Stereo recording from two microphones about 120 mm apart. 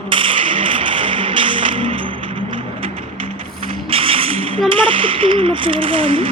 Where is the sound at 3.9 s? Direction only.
50° right (ahead or behind).